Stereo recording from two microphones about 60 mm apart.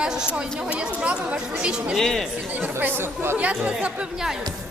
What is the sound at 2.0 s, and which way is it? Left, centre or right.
Speech, centre.